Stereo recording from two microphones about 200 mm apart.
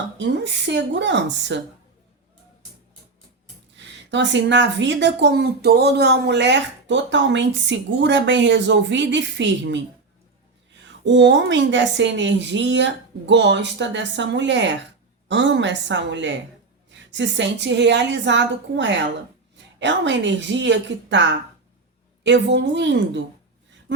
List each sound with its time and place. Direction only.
0.2 s speech: 65° right (ahead or behind)
3.8 s speech: 65° right (ahead or behind)
10.8 s speech: 65° right (ahead or behind)